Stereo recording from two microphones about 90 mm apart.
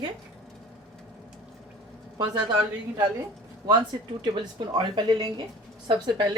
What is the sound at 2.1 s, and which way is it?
Speech, 55° right (ahead or behind).